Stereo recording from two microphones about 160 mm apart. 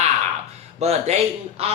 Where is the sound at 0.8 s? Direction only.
40° right (ahead or behind).